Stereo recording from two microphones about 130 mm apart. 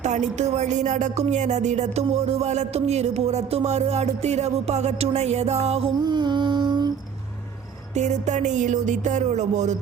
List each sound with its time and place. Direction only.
0.0 s music: 60° right (ahead or behind)
6.1 s female singing: 35° right (ahead or behind)
7.9 s music: 60° right (ahead or behind)